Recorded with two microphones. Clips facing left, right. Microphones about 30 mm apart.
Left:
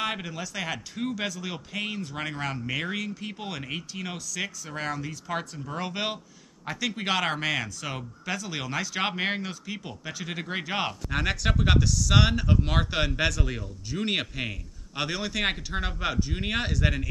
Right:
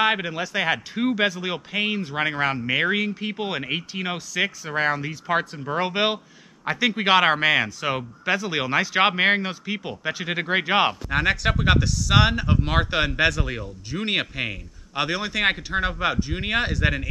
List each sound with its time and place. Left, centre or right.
0.0 s speech: right
11.1 s speech: centre